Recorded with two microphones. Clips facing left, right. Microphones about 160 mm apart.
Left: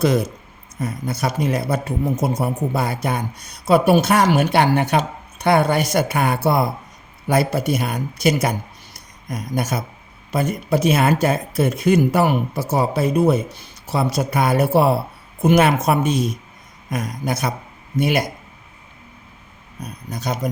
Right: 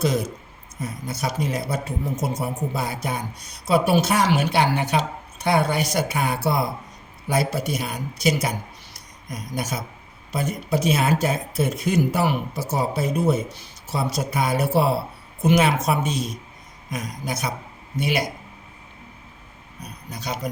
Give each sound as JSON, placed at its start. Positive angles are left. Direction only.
{"t": 0.0, "sound": "speech", "side_deg": 60}
{"t": 19.8, "sound": "speech", "side_deg": 50}